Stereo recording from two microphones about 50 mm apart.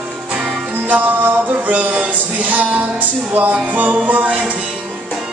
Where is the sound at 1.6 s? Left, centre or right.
Right.